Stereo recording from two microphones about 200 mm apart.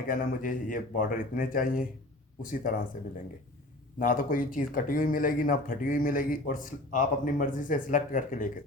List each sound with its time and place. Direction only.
0.1 s speech: 45° left (ahead or behind)
3.9 s speech: 45° left (ahead or behind)